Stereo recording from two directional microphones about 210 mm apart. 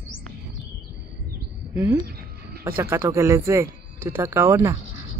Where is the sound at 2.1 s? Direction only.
45° right (ahead or behind).